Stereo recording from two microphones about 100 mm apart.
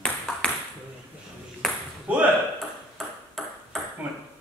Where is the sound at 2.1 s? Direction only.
15° right (ahead or behind).